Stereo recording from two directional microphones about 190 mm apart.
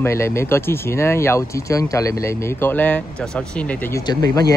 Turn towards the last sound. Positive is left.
turn(degrees=20)  # may be behind; listen again after turning